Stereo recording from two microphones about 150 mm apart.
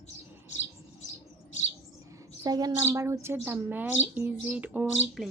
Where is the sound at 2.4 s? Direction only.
25° right (ahead or behind); by 5.2 s 10° right (ahead or behind).